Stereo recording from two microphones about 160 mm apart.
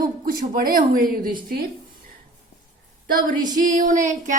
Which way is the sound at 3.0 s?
65° right (ahead or behind).